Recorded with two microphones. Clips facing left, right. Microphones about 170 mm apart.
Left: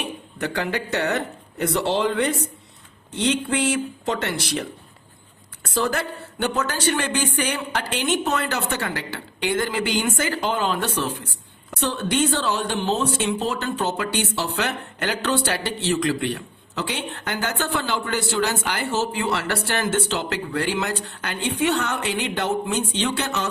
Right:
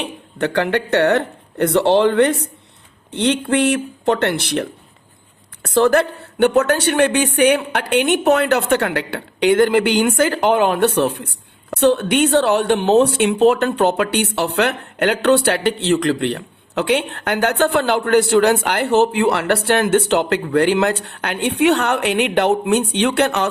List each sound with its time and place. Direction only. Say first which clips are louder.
0.0 s a woman's voice: right 6 dB; 65° right (ahead or behind)